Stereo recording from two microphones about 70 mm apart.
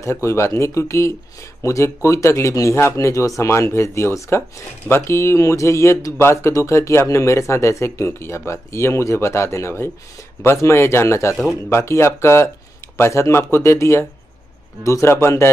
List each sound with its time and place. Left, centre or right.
0.0 s speech: left